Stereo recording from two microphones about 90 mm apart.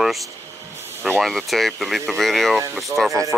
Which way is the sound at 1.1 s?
Centre (ahead or behind).